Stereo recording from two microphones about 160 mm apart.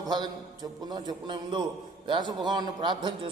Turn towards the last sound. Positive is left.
turn(degrees=-30)  # may be behind; listen again after turning